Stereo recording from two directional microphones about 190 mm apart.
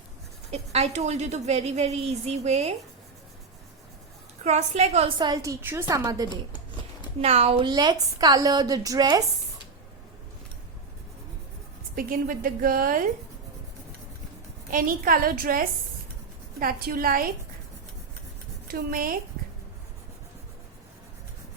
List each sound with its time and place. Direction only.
0.5 s a woman's voice: 35° right (ahead or behind)
4.4 s a woman's voice: 35° right (ahead or behind); by 6.4 s 20° right (ahead or behind)
7.2 s a woman's voice: 30° right (ahead or behind)
11.9 s a woman's voice: 50° right (ahead or behind)
14.7 s a woman's voice: 50° right (ahead or behind)
18.7 s a woman's voice: 50° right (ahead or behind)